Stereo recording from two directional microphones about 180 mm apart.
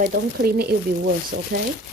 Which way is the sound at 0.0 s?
60° right (ahead or behind).